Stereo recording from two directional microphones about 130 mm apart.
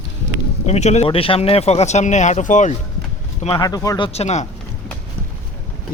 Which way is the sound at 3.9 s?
50° left (ahead or behind).